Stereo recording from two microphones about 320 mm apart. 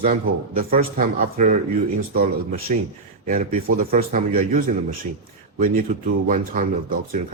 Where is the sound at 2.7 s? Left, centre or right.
Right.